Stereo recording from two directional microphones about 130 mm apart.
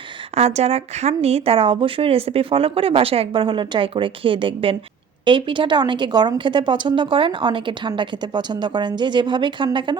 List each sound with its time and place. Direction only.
0.3 s a woman's voice: 55° right (ahead or behind); by 10.0 s 40° right (ahead or behind)